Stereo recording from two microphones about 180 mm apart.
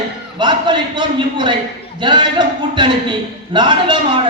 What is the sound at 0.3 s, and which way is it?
A man's voice, 25° right (ahead or behind).